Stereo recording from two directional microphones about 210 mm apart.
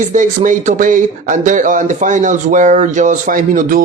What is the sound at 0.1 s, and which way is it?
A man's voice, 35° right (ahead or behind).